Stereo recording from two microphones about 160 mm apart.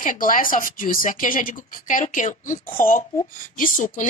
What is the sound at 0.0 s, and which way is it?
Speech, 55° left (ahead or behind).